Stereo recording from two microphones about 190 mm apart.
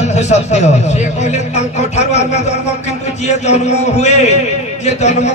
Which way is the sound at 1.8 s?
35° left (ahead or behind).